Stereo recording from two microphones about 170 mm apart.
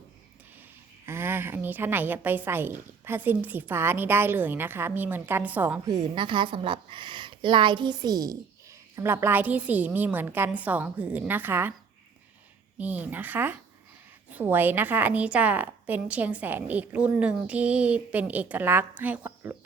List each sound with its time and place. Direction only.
1.0 s a woman's voice: 15° right (ahead or behind)
5.9 s a woman's voice: 25° right (ahead or behind); by 11.7 s 10° right (ahead or behind)
12.8 s a woman's voice: 10° right (ahead or behind)